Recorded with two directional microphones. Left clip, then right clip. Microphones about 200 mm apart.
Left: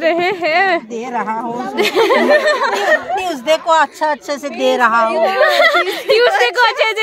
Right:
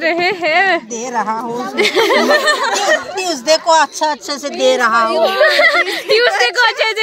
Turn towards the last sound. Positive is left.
turn(degrees=5)  # may be behind; listen again after turning